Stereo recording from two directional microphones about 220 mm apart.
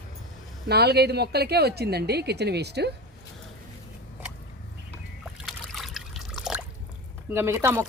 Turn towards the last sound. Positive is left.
turn(degrees=-10)  # may be behind; listen again after turning